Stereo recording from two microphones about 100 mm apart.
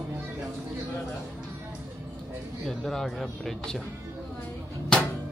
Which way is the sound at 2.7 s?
5° left (ahead or behind).